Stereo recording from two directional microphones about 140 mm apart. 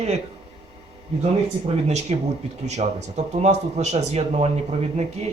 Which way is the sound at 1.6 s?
50° right (ahead or behind).